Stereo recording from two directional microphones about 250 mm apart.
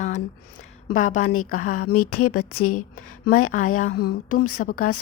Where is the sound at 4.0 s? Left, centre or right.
Left.